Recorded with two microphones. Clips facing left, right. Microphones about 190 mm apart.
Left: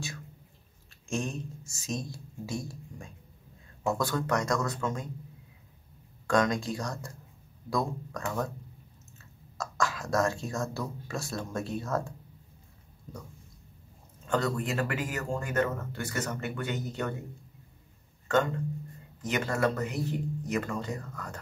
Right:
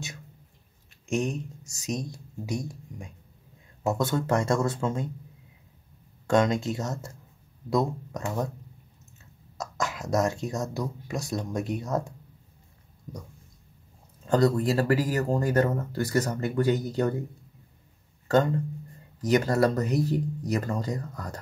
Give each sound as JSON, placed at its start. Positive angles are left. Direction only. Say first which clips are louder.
{"t": 1.0, "sound": "speech", "louder": "right 5 dB", "side_deg": -20}
{"t": 6.2, "sound": "speech", "louder": "right 3 dB", "side_deg": -25}
{"t": 14.2, "sound": "speech", "louder": "right 7 dB", "side_deg": -35}
{"t": 18.3, "sound": "speech", "louder": "right 4 dB", "side_deg": -35}